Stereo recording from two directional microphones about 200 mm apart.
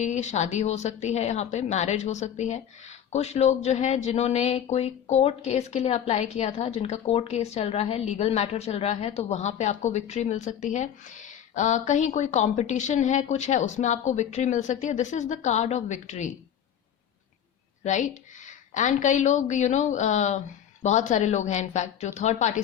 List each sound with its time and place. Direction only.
0.0 s speech: 35° left (ahead or behind)
17.8 s a woman's voice: 35° left (ahead or behind)